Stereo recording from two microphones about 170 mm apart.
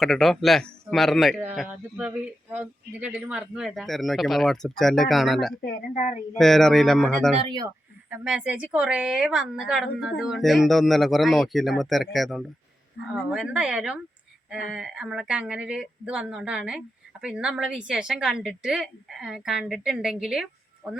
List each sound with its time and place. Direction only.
0.0 s a woman's voice: centre (ahead or behind)
5.6 s speech: 45° left (ahead or behind)
6.3 s a woman's voice: centre (ahead or behind)
7.3 s speech: 25° right (ahead or behind)
8.1 s a woman's voice: 5° right (ahead or behind)